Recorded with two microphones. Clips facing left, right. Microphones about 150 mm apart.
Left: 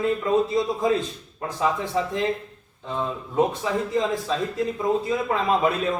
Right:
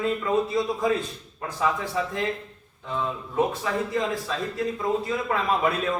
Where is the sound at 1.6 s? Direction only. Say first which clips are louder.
Left 2 dB; 25° left (ahead or behind).